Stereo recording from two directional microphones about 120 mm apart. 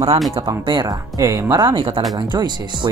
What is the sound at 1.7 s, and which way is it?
Speech, 45° right (ahead or behind).